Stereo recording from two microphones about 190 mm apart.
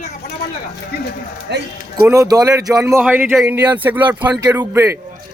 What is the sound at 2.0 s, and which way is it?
Speech, 15° right (ahead or behind).